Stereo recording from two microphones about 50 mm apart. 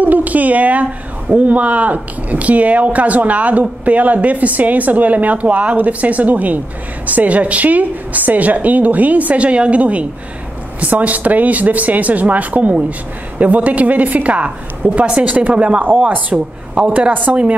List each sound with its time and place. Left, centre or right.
0.0 s a woman's voice: right
17.1 s speech: right